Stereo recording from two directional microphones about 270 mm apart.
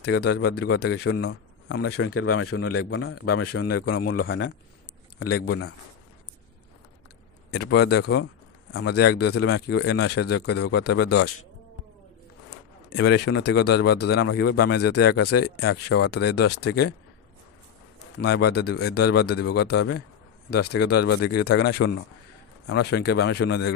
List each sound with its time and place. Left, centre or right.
0.0 s speech: left
1.7 s speech: left
3.9 s speech: left
7.5 s speech: left
13.0 s speech: left
18.2 s speech: left
21.1 s speech: left
21.4 s speech: left